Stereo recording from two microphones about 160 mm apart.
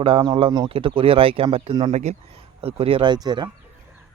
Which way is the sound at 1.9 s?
45° right (ahead or behind).